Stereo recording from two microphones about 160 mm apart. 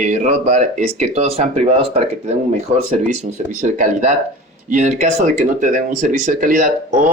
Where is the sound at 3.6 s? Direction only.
50° right (ahead or behind).